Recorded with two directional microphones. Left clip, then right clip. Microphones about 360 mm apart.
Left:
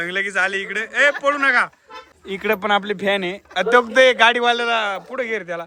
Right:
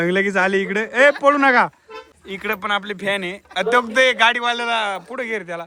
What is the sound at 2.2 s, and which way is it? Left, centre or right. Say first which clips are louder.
Speech: left 3 dB; centre.